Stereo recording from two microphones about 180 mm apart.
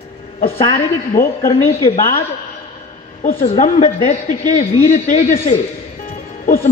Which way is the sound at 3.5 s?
40° left (ahead or behind).